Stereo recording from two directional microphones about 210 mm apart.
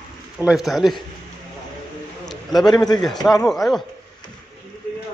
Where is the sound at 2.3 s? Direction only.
Centre (ahead or behind).